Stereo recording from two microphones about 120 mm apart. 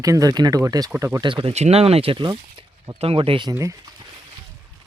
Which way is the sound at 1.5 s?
60° right (ahead or behind).